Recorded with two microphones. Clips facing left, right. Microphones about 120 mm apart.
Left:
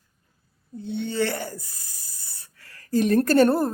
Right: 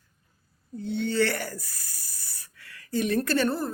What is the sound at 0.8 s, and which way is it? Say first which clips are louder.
Speech: even; 20° left (ahead or behind).